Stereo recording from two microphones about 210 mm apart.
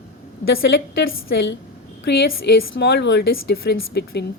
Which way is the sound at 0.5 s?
50° left (ahead or behind).